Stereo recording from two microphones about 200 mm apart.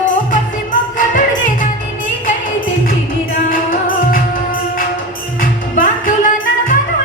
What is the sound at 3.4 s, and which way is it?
Music, 45° left (ahead or behind).